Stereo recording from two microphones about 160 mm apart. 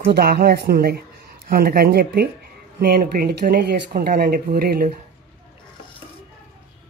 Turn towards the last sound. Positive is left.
turn(degrees=-65)  # may be behind; listen again after turning